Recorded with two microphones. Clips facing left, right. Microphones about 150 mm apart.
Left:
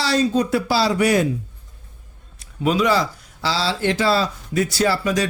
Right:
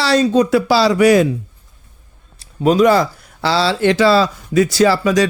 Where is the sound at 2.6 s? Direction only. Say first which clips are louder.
Right 7 dB; 45° right (ahead or behind).